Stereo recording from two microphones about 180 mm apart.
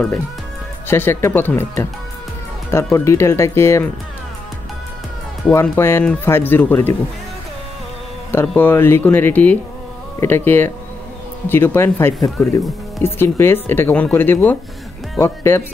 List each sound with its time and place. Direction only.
0.8 s speech: 10° left (ahead or behind)
5.4 s speech: 15° left (ahead or behind)
8.3 s speech: 10° left (ahead or behind)